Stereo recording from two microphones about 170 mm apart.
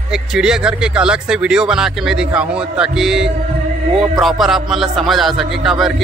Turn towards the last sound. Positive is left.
turn(degrees=0)  # may be behind; listen again after turning